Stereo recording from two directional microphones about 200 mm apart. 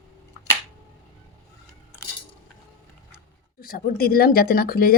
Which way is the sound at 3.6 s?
50° left (ahead or behind).